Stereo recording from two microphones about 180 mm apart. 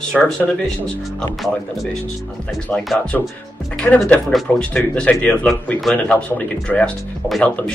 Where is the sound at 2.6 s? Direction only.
5° left (ahead or behind).